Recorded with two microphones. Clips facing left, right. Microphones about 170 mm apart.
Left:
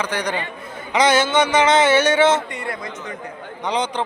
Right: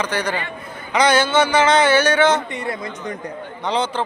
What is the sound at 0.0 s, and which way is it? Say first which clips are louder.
A man's voice: right 1 dB; 15° left (ahead or behind).